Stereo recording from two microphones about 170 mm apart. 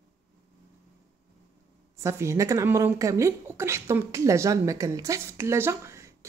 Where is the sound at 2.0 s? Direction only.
15° right (ahead or behind).